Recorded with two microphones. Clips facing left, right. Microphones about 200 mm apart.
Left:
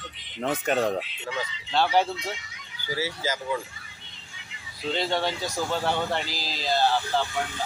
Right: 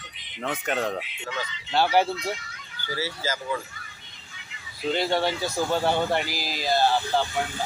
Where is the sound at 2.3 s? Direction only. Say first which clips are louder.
Right 4 dB; 15° left (ahead or behind).